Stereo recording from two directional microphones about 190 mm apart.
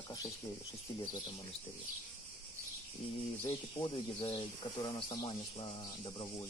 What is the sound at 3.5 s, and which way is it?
Speech, 25° left (ahead or behind).